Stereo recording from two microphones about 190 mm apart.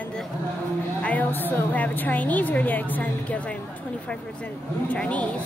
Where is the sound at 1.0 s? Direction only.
10° left (ahead or behind).